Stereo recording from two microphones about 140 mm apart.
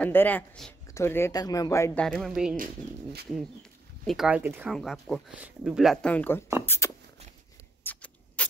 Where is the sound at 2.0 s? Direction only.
Centre (ahead or behind).